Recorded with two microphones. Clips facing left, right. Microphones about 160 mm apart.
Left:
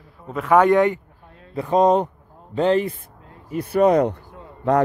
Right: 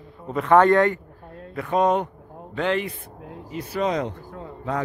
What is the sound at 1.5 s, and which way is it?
Speech, 30° left (ahead or behind).